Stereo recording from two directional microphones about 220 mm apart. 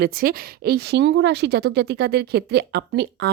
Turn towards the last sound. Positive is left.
turn(degrees=-50)  # may be behind; listen again after turning